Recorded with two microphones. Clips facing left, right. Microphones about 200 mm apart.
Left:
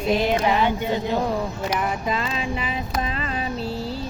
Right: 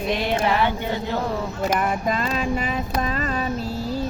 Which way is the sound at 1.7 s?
50° right (ahead or behind).